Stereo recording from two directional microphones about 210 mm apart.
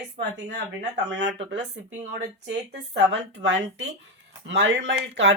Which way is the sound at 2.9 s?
60° right (ahead or behind).